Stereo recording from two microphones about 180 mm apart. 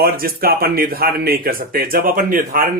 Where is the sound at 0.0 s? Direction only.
55° right (ahead or behind).